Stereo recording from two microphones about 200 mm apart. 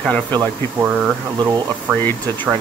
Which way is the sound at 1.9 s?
5° right (ahead or behind).